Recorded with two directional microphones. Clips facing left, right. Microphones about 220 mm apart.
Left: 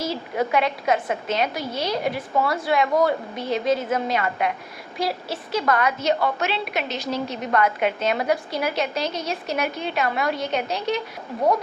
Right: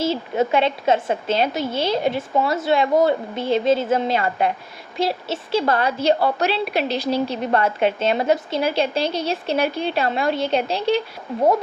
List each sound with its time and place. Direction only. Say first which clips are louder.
0.0 s a woman's voice: right 4 dB; 25° right (ahead or behind)